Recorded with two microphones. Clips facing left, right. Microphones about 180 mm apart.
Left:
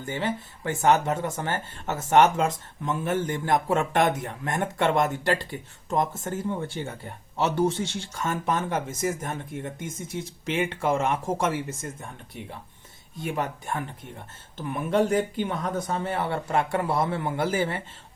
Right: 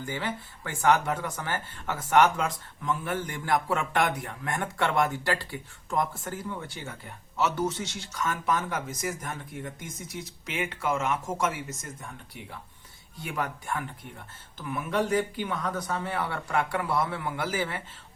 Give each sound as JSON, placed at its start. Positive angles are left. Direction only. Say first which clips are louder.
{"t": 0.0, "sound": "speech", "louder": "left 4 dB", "side_deg": 20}